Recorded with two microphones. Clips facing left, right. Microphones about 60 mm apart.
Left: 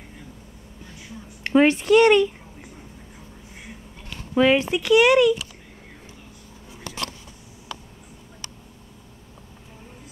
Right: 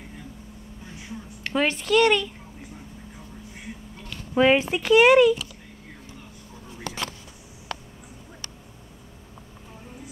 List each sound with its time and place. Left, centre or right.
1.4 s speech: left
4.4 s speech: centre
7.7 s a sound: right